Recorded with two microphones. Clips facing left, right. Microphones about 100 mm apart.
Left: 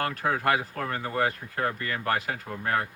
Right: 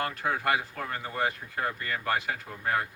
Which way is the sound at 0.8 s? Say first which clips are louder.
Left 4 dB; 60° left (ahead or behind).